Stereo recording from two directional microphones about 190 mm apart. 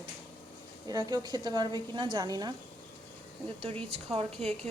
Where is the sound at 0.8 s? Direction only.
20° right (ahead or behind).